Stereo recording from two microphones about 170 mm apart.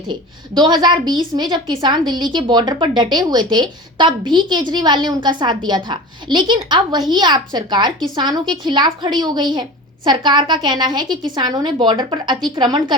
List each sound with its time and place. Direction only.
0.1 s a woman's voice: 25° right (ahead or behind)